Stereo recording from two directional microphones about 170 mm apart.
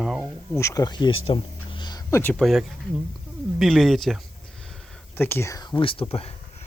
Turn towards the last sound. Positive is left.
turn(degrees=35)  # may be behind; listen again after turning